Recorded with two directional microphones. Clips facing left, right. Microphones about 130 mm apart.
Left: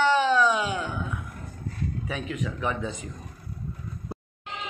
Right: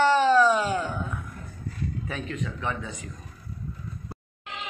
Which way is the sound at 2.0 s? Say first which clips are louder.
Left 3 dB; 10° left (ahead or behind).